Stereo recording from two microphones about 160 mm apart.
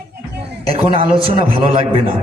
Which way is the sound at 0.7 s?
35° right (ahead or behind).